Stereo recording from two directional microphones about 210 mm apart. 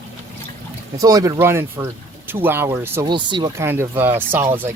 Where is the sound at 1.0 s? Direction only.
15° right (ahead or behind).